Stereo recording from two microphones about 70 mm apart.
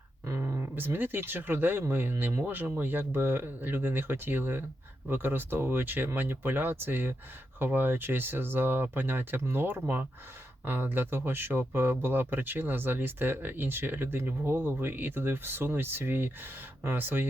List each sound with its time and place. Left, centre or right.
0.3 s speech: right